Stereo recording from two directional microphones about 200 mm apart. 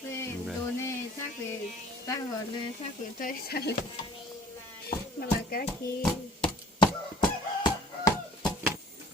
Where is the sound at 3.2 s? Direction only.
50° left (ahead or behind).